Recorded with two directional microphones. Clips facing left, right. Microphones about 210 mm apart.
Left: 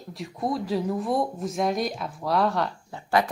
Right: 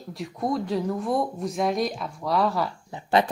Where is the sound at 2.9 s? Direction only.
20° right (ahead or behind).